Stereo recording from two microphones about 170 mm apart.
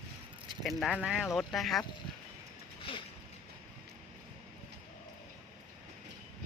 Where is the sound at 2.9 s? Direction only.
35° left (ahead or behind).